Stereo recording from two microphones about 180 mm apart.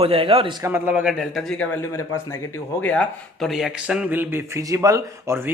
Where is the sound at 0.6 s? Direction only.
10° right (ahead or behind).